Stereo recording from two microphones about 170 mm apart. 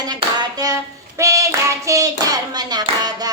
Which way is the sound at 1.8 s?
20° right (ahead or behind).